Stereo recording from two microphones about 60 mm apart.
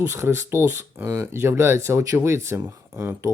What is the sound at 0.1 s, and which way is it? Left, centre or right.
Speech, right.